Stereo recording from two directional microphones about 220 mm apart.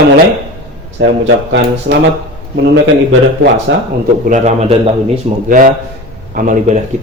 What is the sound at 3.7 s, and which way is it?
Speech, 60° right (ahead or behind).